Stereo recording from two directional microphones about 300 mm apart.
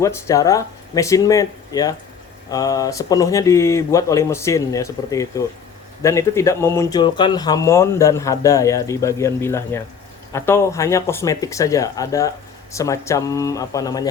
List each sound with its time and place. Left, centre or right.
0.0 s speech: centre